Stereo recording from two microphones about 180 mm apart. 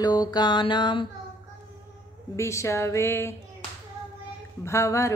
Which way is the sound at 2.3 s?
15° left (ahead or behind).